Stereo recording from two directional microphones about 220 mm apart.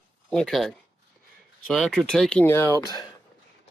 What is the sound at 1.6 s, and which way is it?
Speech, centre (ahead or behind).